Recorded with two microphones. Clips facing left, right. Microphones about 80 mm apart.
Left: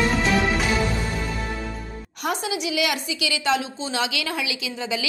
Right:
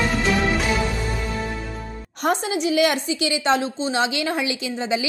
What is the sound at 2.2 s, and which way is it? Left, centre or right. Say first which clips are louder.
A woman's voice: right 5 dB; right.